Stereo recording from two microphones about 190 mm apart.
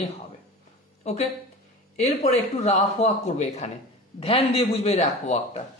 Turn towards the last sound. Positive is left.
turn(degrees=35)  # may be behind; listen again after turning